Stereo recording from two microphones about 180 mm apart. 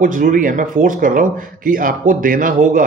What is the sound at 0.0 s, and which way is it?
Speech, 50° right (ahead or behind).